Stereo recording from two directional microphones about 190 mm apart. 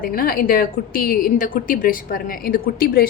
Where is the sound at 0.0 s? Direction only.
50° left (ahead or behind).